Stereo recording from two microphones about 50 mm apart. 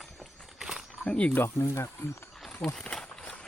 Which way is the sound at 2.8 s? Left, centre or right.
Centre.